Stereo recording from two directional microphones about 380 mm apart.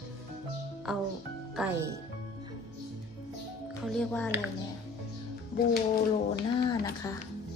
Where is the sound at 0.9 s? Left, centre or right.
Centre.